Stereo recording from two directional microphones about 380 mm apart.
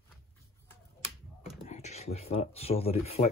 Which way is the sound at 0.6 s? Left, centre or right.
Centre.